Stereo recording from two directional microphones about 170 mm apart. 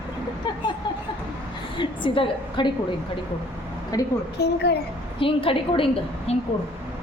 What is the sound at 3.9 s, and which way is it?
Speech, 20° left (ahead or behind).